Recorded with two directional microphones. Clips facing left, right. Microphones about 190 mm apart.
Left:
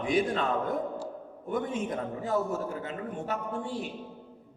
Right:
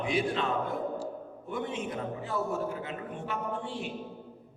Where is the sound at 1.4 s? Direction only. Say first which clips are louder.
Left 4 dB; 45° left (ahead or behind).